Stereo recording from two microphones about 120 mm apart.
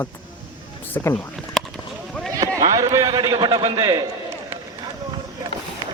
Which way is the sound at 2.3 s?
30° right (ahead or behind).